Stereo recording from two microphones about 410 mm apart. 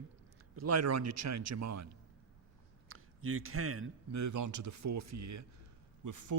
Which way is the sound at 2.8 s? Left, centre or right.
Right.